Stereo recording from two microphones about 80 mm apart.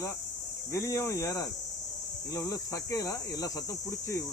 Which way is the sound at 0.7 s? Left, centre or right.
Left.